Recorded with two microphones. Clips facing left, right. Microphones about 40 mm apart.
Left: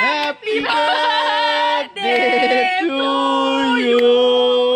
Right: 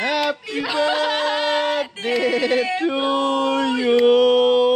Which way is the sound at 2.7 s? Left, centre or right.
Left.